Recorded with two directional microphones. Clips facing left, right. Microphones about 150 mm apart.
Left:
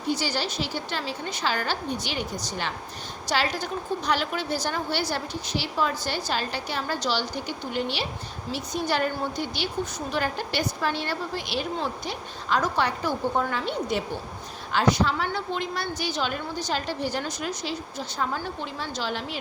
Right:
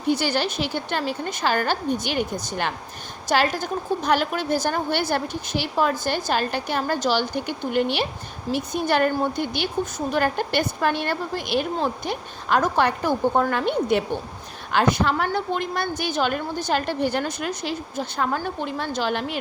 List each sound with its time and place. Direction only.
0.1 s a woman's voice: 60° right (ahead or behind)